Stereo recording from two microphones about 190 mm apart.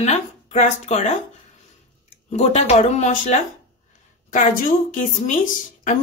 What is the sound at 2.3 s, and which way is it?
A woman's voice, 35° left (ahead or behind).